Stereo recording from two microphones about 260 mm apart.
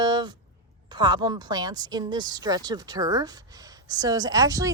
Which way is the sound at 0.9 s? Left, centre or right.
Centre.